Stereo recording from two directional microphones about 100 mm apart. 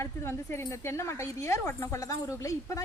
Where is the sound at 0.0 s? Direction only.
25° left (ahead or behind).